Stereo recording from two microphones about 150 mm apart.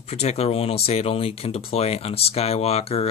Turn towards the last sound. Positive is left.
turn(degrees=45)  # may be behind; listen again after turning